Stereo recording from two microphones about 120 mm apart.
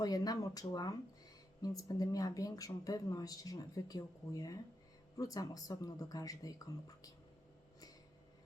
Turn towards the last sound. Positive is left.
turn(degrees=30)  # may be behind; listen again after turning